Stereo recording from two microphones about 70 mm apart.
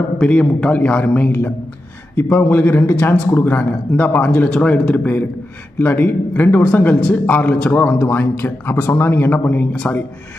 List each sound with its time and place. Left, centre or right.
0.2 s speech: centre